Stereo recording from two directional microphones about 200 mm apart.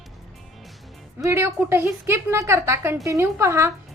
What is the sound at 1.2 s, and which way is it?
A woman's voice, 15° right (ahead or behind).